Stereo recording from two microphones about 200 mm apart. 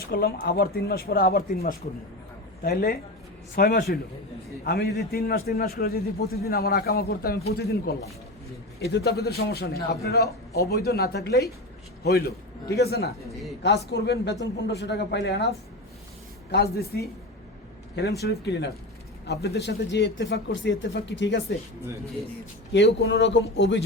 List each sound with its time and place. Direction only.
0.0 s a man's voice: 50° left (ahead or behind)
12.7 s a man's voice: 50° left (ahead or behind)
18.4 s speech: 60° left (ahead or behind)
22.7 s speech: 55° left (ahead or behind)